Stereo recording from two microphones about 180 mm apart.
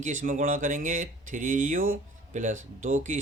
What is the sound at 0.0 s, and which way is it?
Speech, 45° right (ahead or behind).